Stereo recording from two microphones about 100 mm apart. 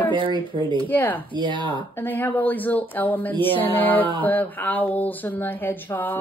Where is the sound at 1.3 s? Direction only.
50° right (ahead or behind).